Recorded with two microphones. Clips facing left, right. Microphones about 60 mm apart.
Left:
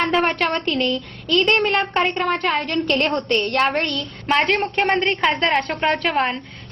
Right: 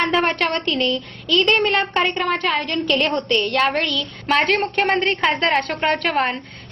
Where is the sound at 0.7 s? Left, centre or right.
Right.